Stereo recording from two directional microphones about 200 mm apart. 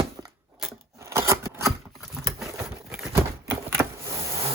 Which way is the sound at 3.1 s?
10° right (ahead or behind).